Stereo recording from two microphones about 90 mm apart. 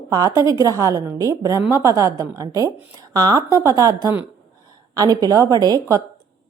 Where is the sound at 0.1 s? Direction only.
45° right (ahead or behind).